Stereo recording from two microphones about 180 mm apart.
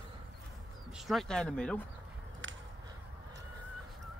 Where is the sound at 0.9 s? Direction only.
Centre (ahead or behind).